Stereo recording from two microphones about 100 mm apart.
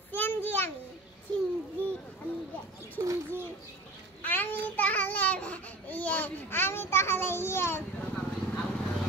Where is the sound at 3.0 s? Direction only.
35° right (ahead or behind).